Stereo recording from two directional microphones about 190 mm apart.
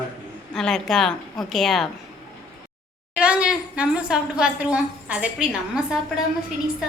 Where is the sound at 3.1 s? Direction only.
5° right (ahead or behind).